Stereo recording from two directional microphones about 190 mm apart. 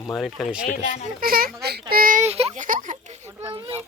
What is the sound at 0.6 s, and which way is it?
Speech, 45° left (ahead or behind).